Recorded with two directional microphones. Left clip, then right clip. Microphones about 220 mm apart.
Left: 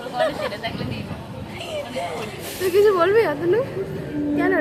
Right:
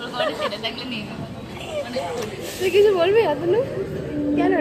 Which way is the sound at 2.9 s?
10° left (ahead or behind).